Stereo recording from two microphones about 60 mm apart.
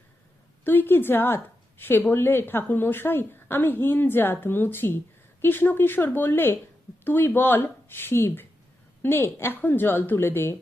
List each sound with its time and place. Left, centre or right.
0.6 s a woman's voice: left